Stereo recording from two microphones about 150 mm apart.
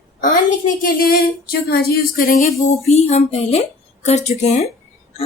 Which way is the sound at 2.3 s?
45° left (ahead or behind).